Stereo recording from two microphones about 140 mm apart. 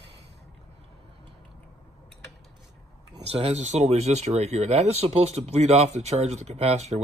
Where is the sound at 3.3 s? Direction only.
50° right (ahead or behind).